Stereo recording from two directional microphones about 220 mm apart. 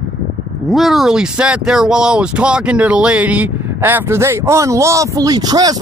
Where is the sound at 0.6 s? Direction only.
Centre (ahead or behind).